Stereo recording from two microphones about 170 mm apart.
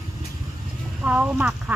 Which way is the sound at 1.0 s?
5° right (ahead or behind).